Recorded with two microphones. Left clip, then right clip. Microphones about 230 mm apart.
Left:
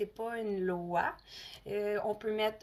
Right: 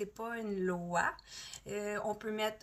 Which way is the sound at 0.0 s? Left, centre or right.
Centre.